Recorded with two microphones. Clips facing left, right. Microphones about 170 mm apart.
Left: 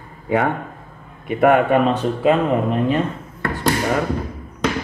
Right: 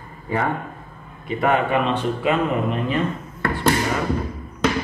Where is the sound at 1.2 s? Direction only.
55° left (ahead or behind); by 3.0 s 40° left (ahead or behind).